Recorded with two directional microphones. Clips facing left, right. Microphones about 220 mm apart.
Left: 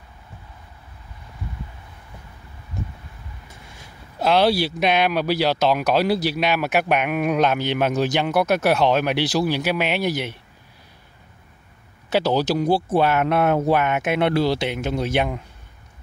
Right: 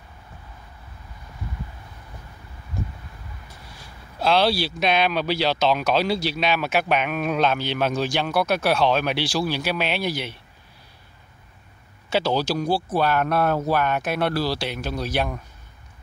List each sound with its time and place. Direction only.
4.2 s speech: 15° left (ahead or behind)
12.2 s speech: 15° left (ahead or behind)